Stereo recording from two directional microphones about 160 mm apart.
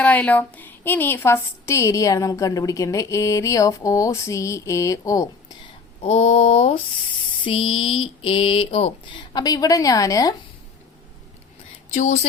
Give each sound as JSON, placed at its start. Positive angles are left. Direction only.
{"t": 0.0, "sound": "a woman's voice", "side_deg": 10}
{"t": 6.0, "sound": "speech", "side_deg": 40}
{"t": 9.3, "sound": "a woman's voice", "side_deg": 25}
{"t": 11.9, "sound": "speech", "side_deg": 50}